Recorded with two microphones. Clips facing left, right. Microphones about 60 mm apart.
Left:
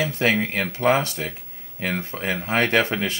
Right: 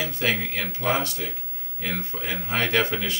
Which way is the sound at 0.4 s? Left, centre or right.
Left.